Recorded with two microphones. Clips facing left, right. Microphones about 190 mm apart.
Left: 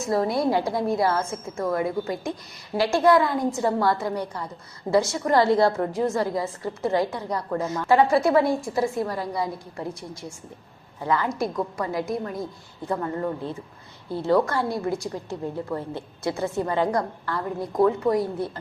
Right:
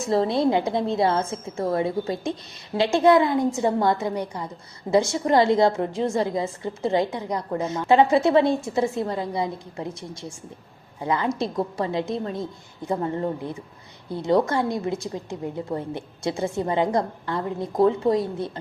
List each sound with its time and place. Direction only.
0.1 s a woman's voice: 25° right (ahead or behind)